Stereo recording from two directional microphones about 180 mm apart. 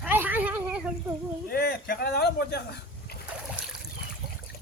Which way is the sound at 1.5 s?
60° left (ahead or behind).